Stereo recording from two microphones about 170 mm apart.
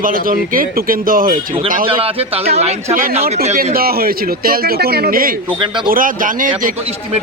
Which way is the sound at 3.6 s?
60° right (ahead or behind).